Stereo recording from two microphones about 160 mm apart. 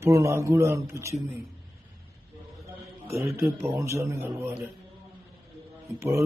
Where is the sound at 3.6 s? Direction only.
15° right (ahead or behind).